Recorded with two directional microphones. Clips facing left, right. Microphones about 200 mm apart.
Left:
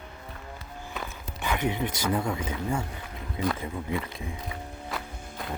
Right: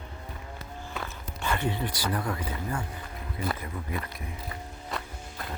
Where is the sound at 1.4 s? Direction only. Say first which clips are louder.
Left 2 dB; 15° left (ahead or behind).